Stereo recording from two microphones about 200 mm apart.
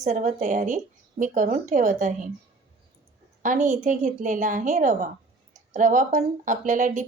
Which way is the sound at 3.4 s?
40° right (ahead or behind).